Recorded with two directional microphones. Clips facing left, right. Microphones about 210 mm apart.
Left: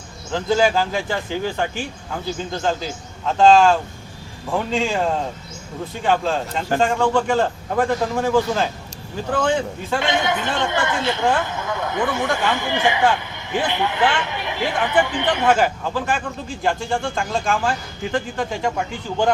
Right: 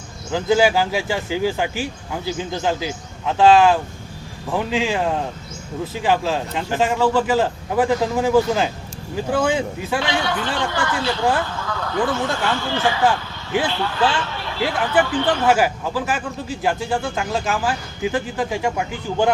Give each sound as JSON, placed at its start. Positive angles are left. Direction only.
{"t": 0.3, "sound": "a man's voice", "side_deg": -10}
{"t": 10.0, "sound": "speech", "side_deg": 20}
{"t": 15.4, "sound": "a man's voice", "side_deg": -5}